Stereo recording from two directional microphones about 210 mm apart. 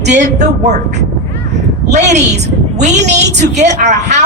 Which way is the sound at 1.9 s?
35° right (ahead or behind).